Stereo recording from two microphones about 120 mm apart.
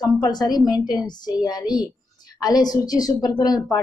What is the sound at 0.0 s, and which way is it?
A woman's voice, 35° left (ahead or behind).